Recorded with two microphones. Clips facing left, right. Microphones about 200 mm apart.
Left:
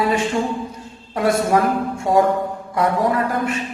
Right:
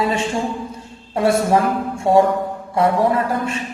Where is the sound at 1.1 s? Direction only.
25° right (ahead or behind).